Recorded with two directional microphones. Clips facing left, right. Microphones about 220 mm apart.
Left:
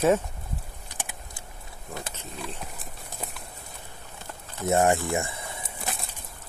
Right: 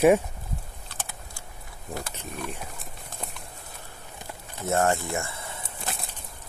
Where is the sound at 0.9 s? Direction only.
15° left (ahead or behind).